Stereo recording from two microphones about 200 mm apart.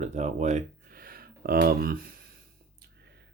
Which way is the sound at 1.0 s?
50° right (ahead or behind).